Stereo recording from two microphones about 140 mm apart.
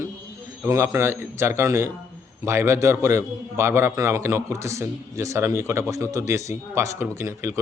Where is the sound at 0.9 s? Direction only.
20° right (ahead or behind).